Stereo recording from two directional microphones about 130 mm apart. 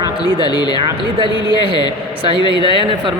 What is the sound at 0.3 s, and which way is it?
Speech, 35° left (ahead or behind).